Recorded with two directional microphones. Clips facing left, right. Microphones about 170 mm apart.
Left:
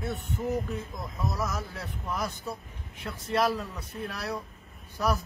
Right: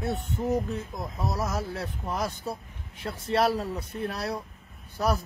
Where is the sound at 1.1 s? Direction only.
30° right (ahead or behind).